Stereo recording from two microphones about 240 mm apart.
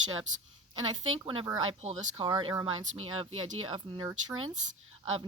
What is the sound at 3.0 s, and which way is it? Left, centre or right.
Speech, right.